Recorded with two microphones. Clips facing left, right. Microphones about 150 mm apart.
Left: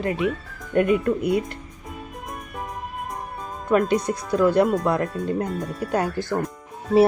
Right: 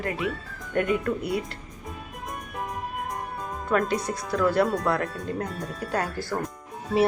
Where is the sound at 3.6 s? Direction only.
20° left (ahead or behind).